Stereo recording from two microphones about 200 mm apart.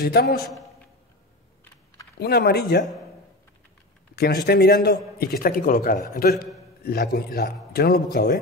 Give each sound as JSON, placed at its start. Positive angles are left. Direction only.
{"t": 0.0, "sound": "a man's voice", "side_deg": 55}
{"t": 2.1, "sound": "a man's voice", "side_deg": 55}
{"t": 4.1, "sound": "a man's voice", "side_deg": 50}